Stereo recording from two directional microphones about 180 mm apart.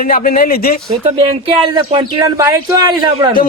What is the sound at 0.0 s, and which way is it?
Speech, 50° left (ahead or behind).